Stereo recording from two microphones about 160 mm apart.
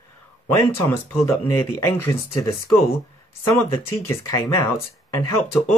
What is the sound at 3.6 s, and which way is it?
Speech, 15° left (ahead or behind).